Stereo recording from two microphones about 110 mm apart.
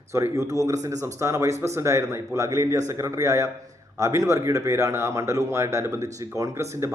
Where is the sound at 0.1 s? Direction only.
25° right (ahead or behind).